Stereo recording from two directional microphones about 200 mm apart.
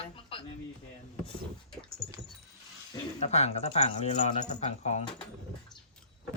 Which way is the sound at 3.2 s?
35° left (ahead or behind).